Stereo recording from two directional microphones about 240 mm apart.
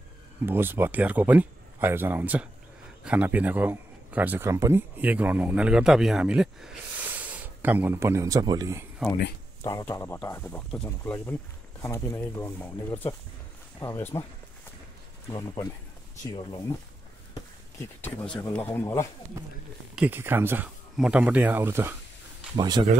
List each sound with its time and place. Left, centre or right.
0.5 s a man's voice: centre
9.6 s speech: centre
15.2 s speech: centre
18.0 s speech: centre
20.0 s speech: centre